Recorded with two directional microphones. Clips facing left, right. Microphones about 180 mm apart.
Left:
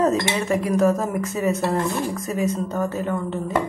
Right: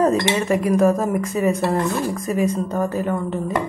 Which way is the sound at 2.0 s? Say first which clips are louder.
Right 3 dB; centre (ahead or behind).